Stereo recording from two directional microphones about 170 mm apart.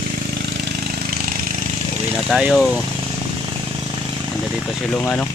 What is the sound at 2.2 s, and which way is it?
Speech, centre (ahead or behind).